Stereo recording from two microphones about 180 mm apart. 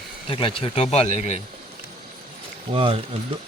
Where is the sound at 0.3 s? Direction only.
30° left (ahead or behind).